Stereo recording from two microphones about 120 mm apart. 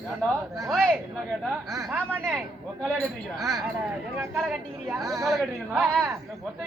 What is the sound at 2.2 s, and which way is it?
Speech, 5° left (ahead or behind).